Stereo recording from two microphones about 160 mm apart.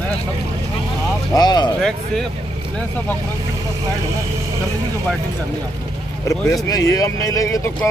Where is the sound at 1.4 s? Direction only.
25° left (ahead or behind).